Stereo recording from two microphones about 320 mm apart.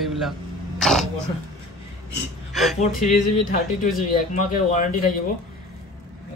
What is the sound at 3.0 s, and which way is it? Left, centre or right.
Speech, left.